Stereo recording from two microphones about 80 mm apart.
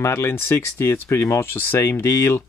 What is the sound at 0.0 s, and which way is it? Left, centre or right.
Speech, left.